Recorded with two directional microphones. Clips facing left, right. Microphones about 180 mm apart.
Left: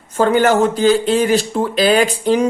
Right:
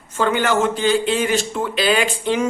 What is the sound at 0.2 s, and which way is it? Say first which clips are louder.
Speech: left 5 dB; 40° left (ahead or behind).